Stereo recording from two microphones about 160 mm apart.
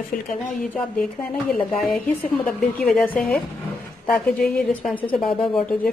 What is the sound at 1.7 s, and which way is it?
Speech, centre (ahead or behind).